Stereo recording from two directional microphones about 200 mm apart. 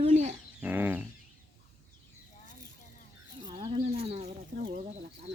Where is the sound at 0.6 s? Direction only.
10° right (ahead or behind).